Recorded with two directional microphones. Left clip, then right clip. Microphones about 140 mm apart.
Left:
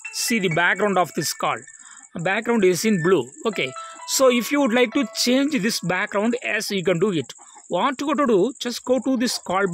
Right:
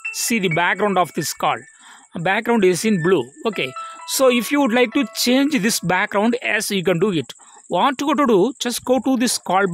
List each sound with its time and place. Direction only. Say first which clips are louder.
0.1 s speech: right 1 dB; 30° right (ahead or behind)